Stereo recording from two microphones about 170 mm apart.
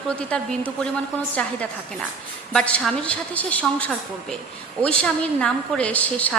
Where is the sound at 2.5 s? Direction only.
5° left (ahead or behind).